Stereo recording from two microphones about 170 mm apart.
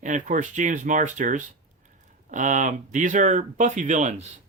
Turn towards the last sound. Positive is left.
turn(degrees=-45)  # may be behind; listen again after turning